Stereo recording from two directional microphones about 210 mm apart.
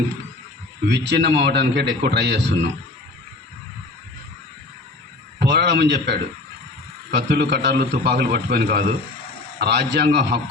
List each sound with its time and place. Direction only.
0.9 s a man's voice: 55° right (ahead or behind)
5.4 s a man's voice: 50° right (ahead or behind)